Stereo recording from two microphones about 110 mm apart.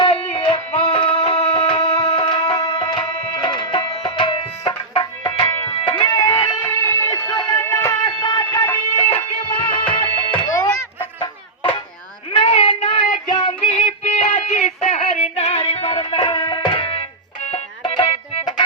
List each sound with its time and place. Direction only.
0.0 s music: 55° left (ahead or behind)
5.5 s music: 30° left (ahead or behind)
5.8 s music: 50° left (ahead or behind)
6.1 s music: 35° left (ahead or behind)
6.6 s music: 25° left (ahead or behind)
8.0 s music: 40° left (ahead or behind)
8.6 s music: 25° left (ahead or behind)
9.1 s music: 50° left (ahead or behind)
10.4 s music: 30° left (ahead or behind)
12.4 s a sound: 55° left (ahead or behind)
13.6 s music: 55° left (ahead or behind)
14.1 s music: 75° left (ahead or behind); by 18.4 s 55° left (ahead or behind)